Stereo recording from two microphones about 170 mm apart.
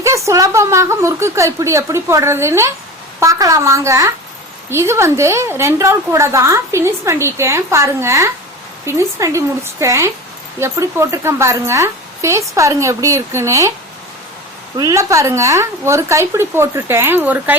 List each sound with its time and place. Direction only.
0.0 s a woman's voice: 15° right (ahead or behind)
14.8 s a woman's voice: 20° right (ahead or behind)